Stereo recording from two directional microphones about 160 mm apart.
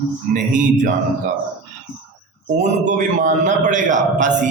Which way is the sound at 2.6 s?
50° right (ahead or behind).